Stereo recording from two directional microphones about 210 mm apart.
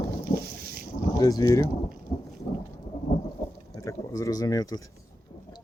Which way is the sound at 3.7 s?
15° left (ahead or behind).